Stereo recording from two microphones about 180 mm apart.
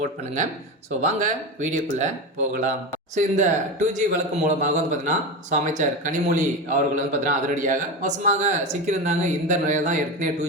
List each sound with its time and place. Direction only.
1.0 s a man's voice: 40° right (ahead or behind)